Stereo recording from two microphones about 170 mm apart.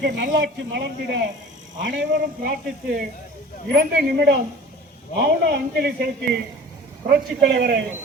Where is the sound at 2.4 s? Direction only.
65° right (ahead or behind).